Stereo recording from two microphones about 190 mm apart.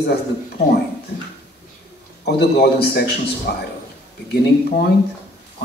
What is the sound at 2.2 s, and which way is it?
A man's voice, 55° left (ahead or behind).